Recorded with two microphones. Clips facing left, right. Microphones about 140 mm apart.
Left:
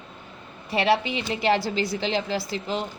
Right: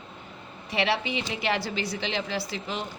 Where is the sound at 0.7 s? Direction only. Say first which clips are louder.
Left 4 dB; 40° left (ahead or behind).